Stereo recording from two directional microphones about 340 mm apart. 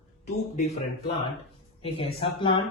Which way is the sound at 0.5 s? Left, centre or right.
Centre.